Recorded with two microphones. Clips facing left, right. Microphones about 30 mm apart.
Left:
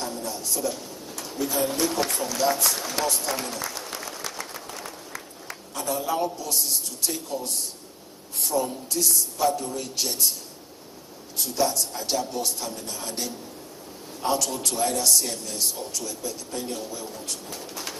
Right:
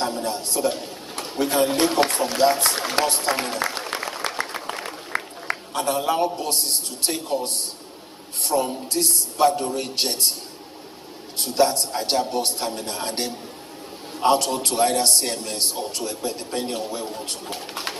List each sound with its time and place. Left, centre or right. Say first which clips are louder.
0.0 s a man's voice: right 6 dB; right
11.3 s a man's voice: right 5 dB; right